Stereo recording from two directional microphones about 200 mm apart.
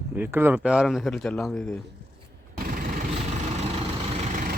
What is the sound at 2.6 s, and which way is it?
Vehicle, 45° right (ahead or behind).